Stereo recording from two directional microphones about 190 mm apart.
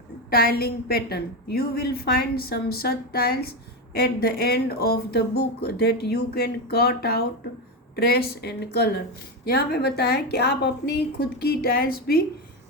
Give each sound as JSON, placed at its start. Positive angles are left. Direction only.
{"t": 0.3, "sound": "a woman's voice", "side_deg": 55}